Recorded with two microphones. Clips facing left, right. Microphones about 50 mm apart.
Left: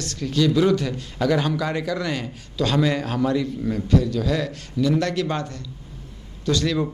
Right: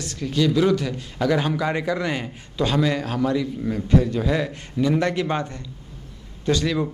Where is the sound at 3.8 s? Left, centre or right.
Right.